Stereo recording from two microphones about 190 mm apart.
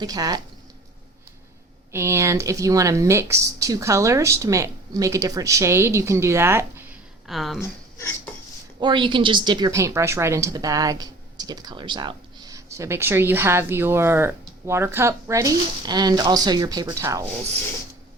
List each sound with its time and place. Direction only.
0.0 s speech: 20° right (ahead or behind)
1.9 s a woman's voice: 15° right (ahead or behind)
7.3 s a woman's voice: centre (ahead or behind)
7.6 s a sound: 15° left (ahead or behind)
8.8 s a woman's voice: 25° right (ahead or behind)